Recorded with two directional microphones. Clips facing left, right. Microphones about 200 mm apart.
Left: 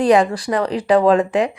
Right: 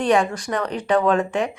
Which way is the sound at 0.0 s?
35° left (ahead or behind).